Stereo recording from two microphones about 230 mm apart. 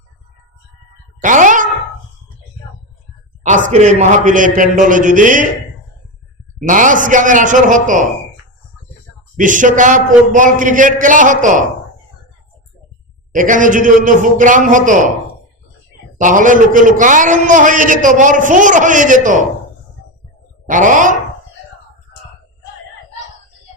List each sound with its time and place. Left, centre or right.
1.2 s a sound: right
3.4 s a man's voice: right
6.6 s a man's voice: right
9.4 s a man's voice: right
13.3 s a man's voice: right
16.2 s a man's voice: right
20.7 s a man's voice: right